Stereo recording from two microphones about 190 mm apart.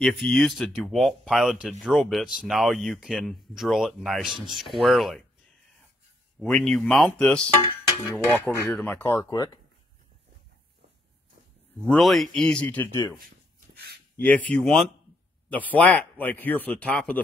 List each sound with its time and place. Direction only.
0.0 s speech: centre (ahead or behind)
6.4 s speech: 5° left (ahead or behind)
11.9 s speech: centre (ahead or behind)
14.2 s speech: 10° left (ahead or behind)